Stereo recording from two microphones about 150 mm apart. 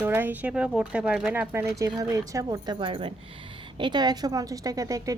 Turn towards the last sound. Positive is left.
turn(degrees=-20)  # may be behind; listen again after turning